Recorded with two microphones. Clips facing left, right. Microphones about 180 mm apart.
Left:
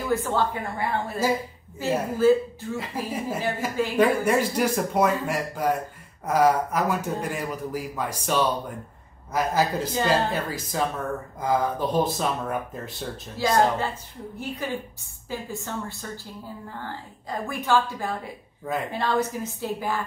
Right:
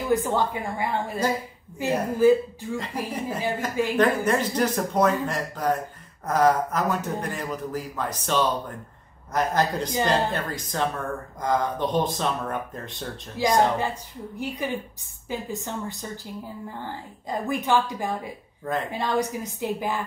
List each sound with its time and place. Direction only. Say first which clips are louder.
0.1 s a woman's voice: right 1 dB; 15° right (ahead or behind)
2.8 s speech: left 2 dB; 5° left (ahead or behind)
13.4 s a woman's voice: even; 15° right (ahead or behind)
15.2 s a woman's voice: right 2 dB; 20° right (ahead or behind)